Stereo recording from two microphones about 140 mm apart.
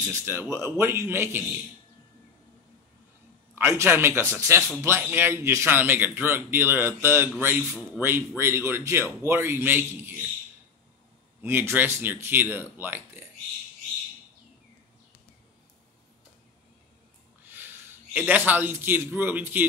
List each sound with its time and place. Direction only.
0.1 s a man's voice: 15° right (ahead or behind)
3.5 s a man's voice: 15° right (ahead or behind)
8.4 s a man's voice: 20° right (ahead or behind)
11.4 s a man's voice: 15° right (ahead or behind)
17.5 s a man's voice: 15° right (ahead or behind)